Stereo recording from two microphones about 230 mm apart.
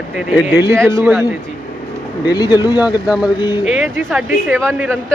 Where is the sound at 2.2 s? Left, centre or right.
Centre.